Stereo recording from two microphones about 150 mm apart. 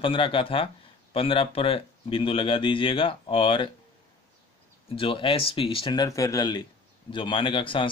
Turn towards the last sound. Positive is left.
turn(degrees=35)  # may be behind; listen again after turning